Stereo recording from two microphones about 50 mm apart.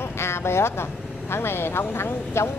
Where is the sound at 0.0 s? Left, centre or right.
Left.